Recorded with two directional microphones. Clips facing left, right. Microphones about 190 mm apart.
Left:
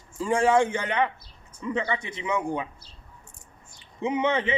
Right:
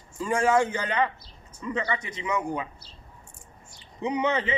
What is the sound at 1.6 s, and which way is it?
A man's voice, 15° left (ahead or behind).